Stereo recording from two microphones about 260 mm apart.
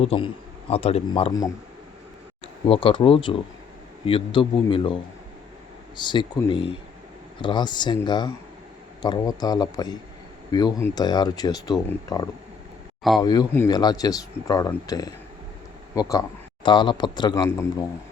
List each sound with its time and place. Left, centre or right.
0.0 s a man's voice: left
2.6 s a man's voice: left
6.0 s speech: centre